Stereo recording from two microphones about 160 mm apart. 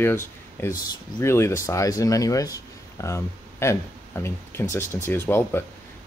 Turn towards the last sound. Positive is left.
turn(degrees=15)  # may be behind; listen again after turning